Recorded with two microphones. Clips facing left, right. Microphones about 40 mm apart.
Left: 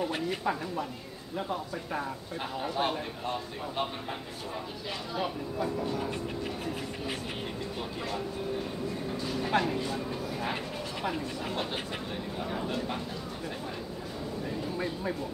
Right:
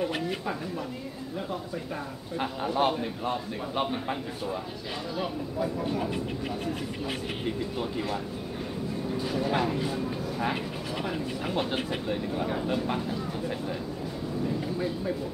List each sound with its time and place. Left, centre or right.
2.6 s speech: centre
5.1 s speech: centre
5.8 s speech: centre
9.4 s speech: centre